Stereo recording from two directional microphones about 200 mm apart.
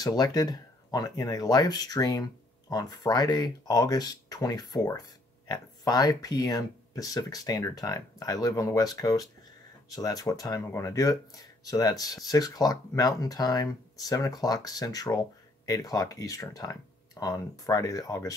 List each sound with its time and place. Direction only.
0.0 s speech: 20° left (ahead or behind)